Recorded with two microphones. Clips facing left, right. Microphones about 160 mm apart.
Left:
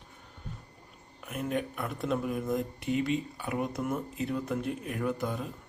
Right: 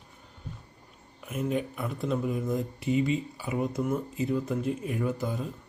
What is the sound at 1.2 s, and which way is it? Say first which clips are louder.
Speech: right 3 dB; centre (ahead or behind).